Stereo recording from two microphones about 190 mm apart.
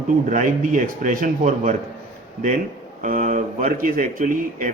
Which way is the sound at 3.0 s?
45° right (ahead or behind).